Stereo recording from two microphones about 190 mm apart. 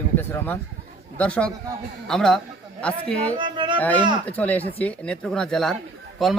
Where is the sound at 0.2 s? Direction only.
10° left (ahead or behind).